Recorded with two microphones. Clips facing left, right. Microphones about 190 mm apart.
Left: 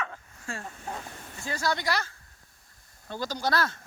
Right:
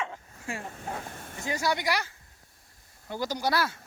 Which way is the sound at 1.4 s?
15° right (ahead or behind).